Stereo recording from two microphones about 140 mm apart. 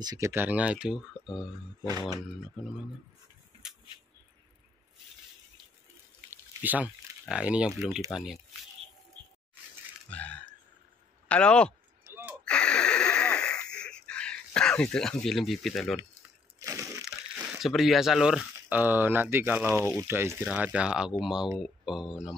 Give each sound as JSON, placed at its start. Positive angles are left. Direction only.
{"t": 0.0, "sound": "speech", "side_deg": -30}
{"t": 0.3, "sound": "speech", "side_deg": -15}
{"t": 1.9, "sound": "speech", "side_deg": -25}
{"t": 6.3, "sound": "speech", "side_deg": -10}
{"t": 10.0, "sound": "a sound", "side_deg": 10}
{"t": 11.2, "sound": "speech", "side_deg": 10}
{"t": 12.0, "sound": "gasp", "side_deg": -15}
{"t": 12.4, "sound": "wheeze", "side_deg": 5}
{"t": 16.5, "sound": "a sound", "side_deg": -20}
{"t": 17.0, "sound": "crumpling", "side_deg": 0}
{"t": 18.7, "sound": "speech", "side_deg": -15}